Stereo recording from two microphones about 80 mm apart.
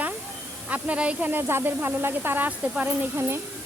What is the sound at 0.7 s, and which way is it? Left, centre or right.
Speech, centre.